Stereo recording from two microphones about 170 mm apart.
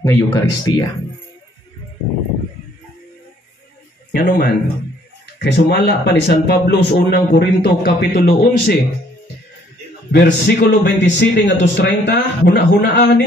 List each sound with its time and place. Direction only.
0.0 s speech: 20° left (ahead or behind)
4.1 s speech: 60° left (ahead or behind)
5.4 s speech: 75° left (ahead or behind)
8.3 s speech: 60° left (ahead or behind)
10.1 s speech: 75° left (ahead or behind)